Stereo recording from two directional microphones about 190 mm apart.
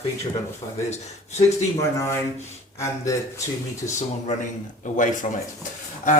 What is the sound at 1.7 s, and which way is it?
Speech, 15° left (ahead or behind).